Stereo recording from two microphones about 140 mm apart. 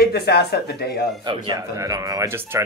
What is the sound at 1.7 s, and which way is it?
Speech, 25° right (ahead or behind).